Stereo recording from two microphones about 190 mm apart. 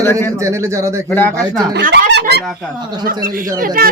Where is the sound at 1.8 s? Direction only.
60° right (ahead or behind).